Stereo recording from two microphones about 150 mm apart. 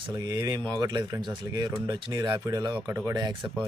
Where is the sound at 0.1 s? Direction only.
25° right (ahead or behind).